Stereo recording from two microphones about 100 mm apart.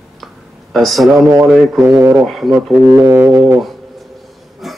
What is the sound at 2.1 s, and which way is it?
Speech, centre (ahead or behind).